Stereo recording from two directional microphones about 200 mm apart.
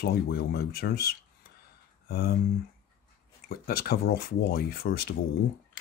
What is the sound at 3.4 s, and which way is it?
Speech, 50° left (ahead or behind).